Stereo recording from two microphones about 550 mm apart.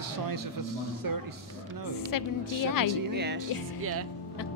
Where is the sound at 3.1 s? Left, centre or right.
Centre.